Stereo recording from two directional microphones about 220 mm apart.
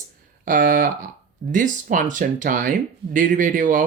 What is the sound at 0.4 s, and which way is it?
Speech, 40° right (ahead or behind).